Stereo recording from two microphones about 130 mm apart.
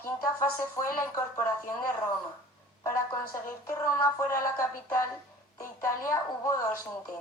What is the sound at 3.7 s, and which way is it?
Speech, 20° left (ahead or behind).